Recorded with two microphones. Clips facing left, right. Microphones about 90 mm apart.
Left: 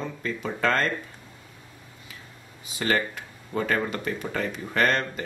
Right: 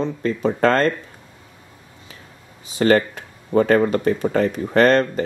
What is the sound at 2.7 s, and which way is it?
Speech, 35° right (ahead or behind).